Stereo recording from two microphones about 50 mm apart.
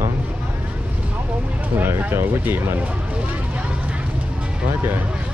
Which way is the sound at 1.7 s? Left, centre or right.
Right.